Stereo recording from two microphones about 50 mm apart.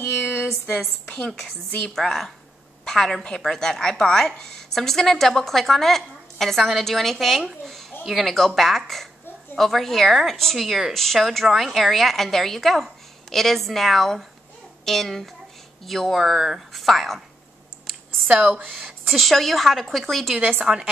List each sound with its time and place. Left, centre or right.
0.0 s a sound: left
1.0 s a woman's voice: centre
18.3 s speech: right
18.7 s a woman's voice: centre
20.7 s a woman's voice: centre